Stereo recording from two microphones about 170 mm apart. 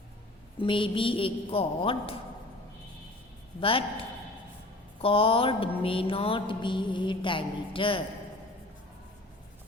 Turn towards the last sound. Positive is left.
turn(degrees=30)  # may be behind; listen again after turning